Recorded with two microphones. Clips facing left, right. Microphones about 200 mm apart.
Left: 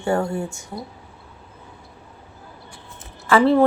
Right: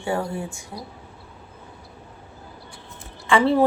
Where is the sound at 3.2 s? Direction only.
Centre (ahead or behind).